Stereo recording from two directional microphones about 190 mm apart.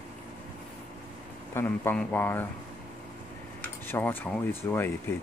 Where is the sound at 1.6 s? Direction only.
10° left (ahead or behind).